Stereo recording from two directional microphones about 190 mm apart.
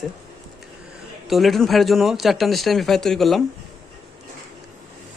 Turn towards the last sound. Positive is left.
turn(degrees=0)  # may be behind; listen again after turning